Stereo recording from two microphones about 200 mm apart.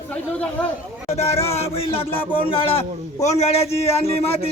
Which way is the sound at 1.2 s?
30° left (ahead or behind).